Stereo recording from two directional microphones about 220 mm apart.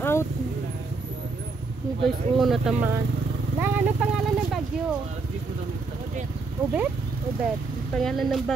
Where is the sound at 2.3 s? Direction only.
Centre (ahead or behind).